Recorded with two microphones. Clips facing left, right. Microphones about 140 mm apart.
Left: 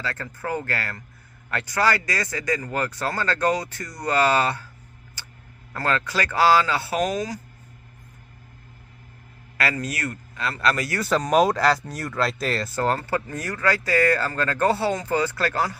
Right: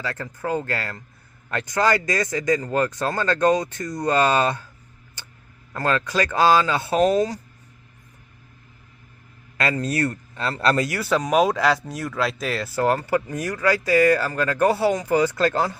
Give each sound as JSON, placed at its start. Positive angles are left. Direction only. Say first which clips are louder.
{"t": 0.0, "sound": "speech", "louder": "right 2 dB", "side_deg": -15}
{"t": 5.2, "sound": "tick-tock", "louder": "even", "side_deg": -20}
{"t": 5.7, "sound": "speech", "louder": "right 3 dB", "side_deg": -20}
{"t": 9.6, "sound": "a man's voice", "louder": "right 4 dB", "side_deg": -25}
{"t": 11.0, "sound": "speech", "louder": "left 1 dB", "side_deg": 0}